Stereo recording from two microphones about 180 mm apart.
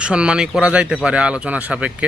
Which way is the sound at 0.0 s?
5° right (ahead or behind).